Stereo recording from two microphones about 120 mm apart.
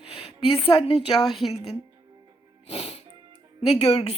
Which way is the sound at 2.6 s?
55° left (ahead or behind).